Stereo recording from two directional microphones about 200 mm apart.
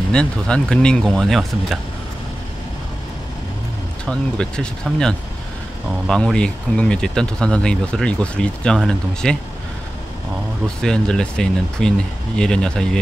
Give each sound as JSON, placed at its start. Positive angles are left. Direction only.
{"t": 0.1, "sound": "speech", "side_deg": 5}
{"t": 4.0, "sound": "speech", "side_deg": 5}
{"t": 10.8, "sound": "speech", "side_deg": 5}